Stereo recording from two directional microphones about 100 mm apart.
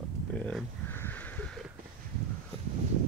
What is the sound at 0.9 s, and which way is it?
Crow, 20° left (ahead or behind).